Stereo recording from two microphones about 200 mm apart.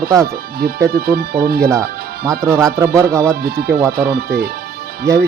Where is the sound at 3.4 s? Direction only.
50° right (ahead or behind).